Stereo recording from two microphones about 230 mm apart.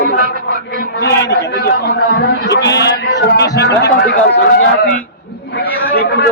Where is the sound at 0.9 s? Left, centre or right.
Left.